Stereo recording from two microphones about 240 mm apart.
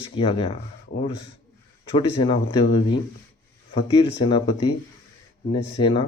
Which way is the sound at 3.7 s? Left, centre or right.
Left.